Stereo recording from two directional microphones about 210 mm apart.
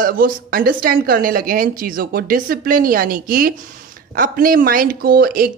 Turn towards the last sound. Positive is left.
turn(degrees=-45)  # may be behind; listen again after turning